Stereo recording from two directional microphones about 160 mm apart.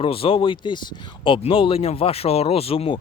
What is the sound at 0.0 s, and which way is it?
Speech, 35° left (ahead or behind).